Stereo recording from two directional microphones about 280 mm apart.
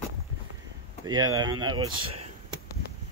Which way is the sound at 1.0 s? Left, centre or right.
Centre.